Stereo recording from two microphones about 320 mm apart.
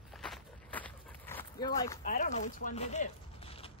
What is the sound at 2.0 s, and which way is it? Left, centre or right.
Chopping, left.